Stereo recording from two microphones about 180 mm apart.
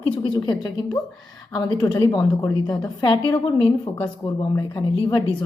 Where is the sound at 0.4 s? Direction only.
20° left (ahead or behind).